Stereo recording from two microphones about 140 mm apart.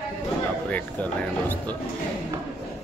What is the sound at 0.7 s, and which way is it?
Speech, 10° left (ahead or behind).